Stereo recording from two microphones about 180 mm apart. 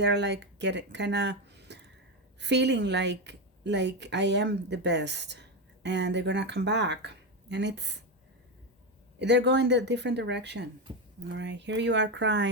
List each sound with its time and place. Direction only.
0.0 s speech: 70° right (ahead or behind)
9.1 s speech: 70° right (ahead or behind)